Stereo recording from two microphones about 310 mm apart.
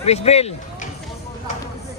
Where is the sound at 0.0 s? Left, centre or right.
Centre.